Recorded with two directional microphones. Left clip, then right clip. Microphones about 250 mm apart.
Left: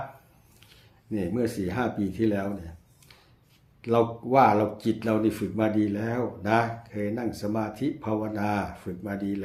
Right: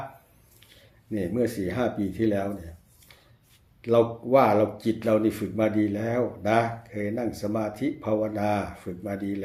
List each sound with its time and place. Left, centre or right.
1.1 s speech: centre
3.8 s speech: centre